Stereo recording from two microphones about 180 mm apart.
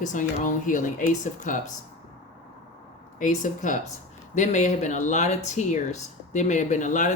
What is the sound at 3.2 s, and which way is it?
Speech, 45° left (ahead or behind).